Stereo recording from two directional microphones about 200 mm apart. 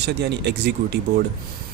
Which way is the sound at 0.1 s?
55° right (ahead or behind).